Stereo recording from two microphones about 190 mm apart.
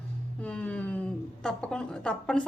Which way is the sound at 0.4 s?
5° left (ahead or behind).